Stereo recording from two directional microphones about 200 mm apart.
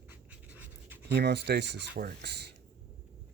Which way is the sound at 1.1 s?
55° right (ahead or behind).